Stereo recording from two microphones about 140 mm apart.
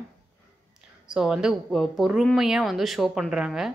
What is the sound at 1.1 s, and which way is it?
Speech, 5° right (ahead or behind).